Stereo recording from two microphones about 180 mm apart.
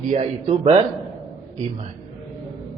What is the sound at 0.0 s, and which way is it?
Speech, 40° right (ahead or behind).